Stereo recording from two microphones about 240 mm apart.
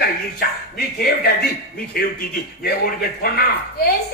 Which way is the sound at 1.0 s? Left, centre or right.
Left.